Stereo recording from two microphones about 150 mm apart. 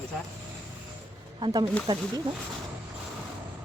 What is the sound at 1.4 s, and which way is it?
Speech, 30° right (ahead or behind).